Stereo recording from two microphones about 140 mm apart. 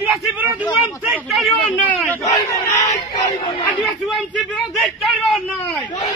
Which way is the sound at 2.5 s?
25° left (ahead or behind).